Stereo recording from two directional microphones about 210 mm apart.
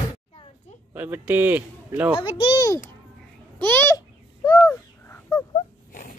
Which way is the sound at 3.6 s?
10° left (ahead or behind).